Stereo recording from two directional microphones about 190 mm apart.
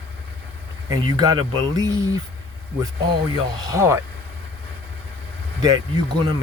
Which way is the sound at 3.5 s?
20° right (ahead or behind).